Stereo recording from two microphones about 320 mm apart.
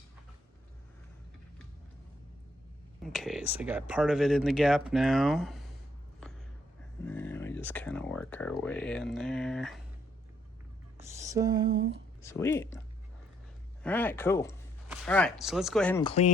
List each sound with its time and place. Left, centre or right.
3.0 s speech: centre
7.0 s speech: centre
10.9 s a sound: centre
11.8 s speech: right
12.2 s speech: centre
13.8 s speech: centre
16.0 s speech: centre